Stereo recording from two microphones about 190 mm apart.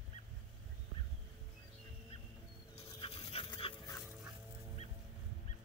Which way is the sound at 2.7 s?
30° left (ahead or behind).